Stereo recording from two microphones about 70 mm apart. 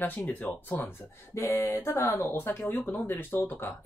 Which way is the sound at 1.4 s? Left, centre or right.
Left.